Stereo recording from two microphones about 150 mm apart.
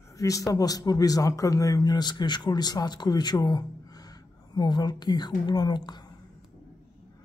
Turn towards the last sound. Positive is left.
turn(degrees=30)  # may be behind; listen again after turning